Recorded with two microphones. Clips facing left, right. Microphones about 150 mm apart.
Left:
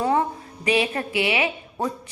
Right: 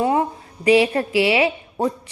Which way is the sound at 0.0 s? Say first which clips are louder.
Right 2 dB; 25° right (ahead or behind).